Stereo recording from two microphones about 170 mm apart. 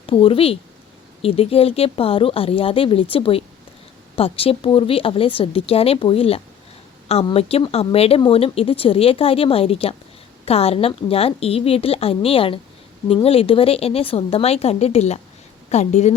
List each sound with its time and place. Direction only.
0.0 s speech: 35° left (ahead or behind)